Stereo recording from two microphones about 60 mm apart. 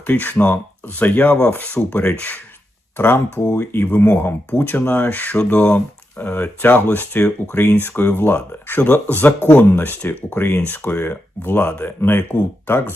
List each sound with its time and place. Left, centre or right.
0.1 s speech: left
3.5 s speech: left